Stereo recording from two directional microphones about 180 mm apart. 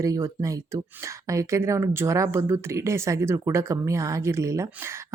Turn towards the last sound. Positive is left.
turn(degrees=-15)  # may be behind; listen again after turning